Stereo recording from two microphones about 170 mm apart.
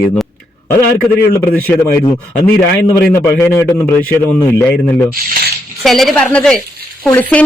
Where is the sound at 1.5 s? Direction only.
10° left (ahead or behind).